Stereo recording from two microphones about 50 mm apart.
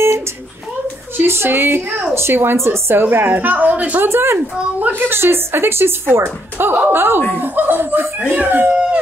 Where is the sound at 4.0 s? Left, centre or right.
Right.